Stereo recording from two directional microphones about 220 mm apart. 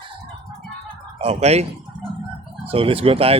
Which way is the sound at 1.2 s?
30° right (ahead or behind).